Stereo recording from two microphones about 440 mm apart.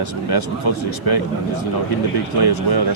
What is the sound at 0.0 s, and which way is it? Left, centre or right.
Speech, left.